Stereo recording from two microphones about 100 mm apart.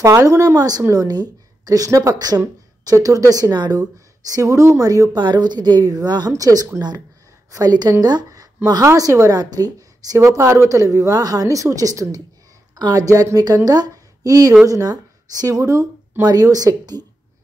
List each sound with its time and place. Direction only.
0.0 s a woman's voice: 30° right (ahead or behind)
4.3 s a woman's voice: 30° right (ahead or behind)
5.2 s a woman's voice: 45° right (ahead or behind)